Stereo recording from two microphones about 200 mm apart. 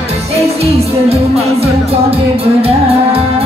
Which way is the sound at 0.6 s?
30° right (ahead or behind).